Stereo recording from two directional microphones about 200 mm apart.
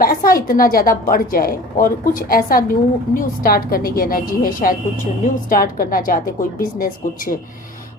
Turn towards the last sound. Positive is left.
turn(degrees=45)  # may be behind; listen again after turning